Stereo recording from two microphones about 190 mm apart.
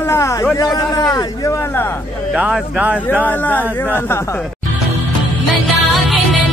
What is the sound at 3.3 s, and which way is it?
Speech, 10° left (ahead or behind).